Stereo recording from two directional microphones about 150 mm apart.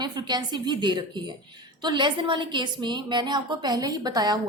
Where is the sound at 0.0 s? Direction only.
30° right (ahead or behind).